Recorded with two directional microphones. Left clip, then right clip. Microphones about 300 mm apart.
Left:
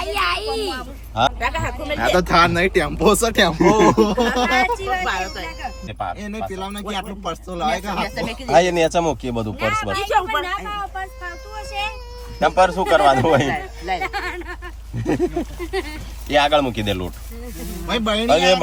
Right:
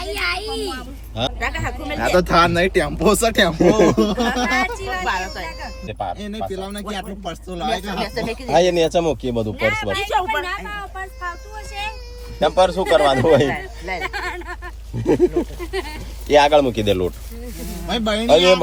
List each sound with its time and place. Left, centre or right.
0.0 s a sound: centre
1.5 s speech: left
1.8 s speech: centre
7.6 s a man's voice: centre